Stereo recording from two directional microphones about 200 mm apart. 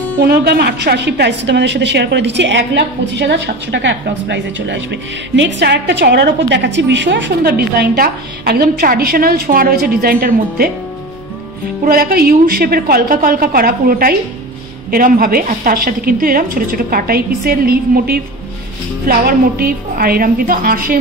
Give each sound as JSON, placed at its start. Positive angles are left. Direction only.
{"t": 0.3, "sound": "a woman's voice", "side_deg": -55}
{"t": 11.8, "sound": "a woman's voice", "side_deg": -45}